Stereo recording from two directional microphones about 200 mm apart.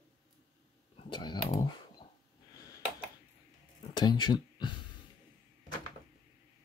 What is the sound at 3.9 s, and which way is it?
Speech, 20° left (ahead or behind).